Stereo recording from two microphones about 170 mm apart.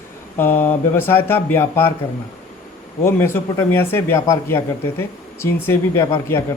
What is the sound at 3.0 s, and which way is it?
Speech, 15° left (ahead or behind).